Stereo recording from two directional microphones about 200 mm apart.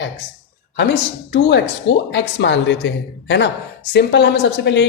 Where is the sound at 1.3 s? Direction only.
60° left (ahead or behind).